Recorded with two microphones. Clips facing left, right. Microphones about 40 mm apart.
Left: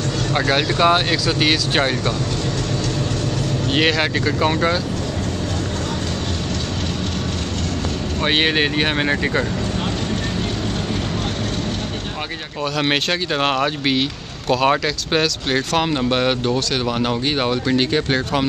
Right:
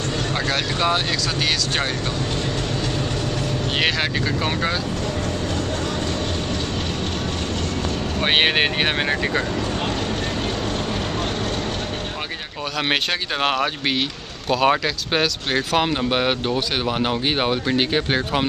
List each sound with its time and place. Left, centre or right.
0.3 s speech: centre
3.7 s speech: centre
8.2 s speech: right
8.8 s speech: centre
12.8 s speech: centre